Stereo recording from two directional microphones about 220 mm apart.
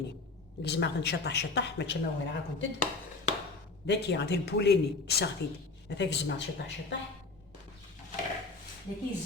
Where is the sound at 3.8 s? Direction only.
50° left (ahead or behind).